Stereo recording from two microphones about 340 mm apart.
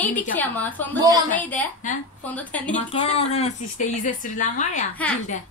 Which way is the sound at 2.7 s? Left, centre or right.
Centre.